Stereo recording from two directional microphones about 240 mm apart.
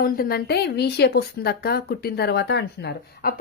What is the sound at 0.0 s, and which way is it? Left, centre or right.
A woman's voice, left.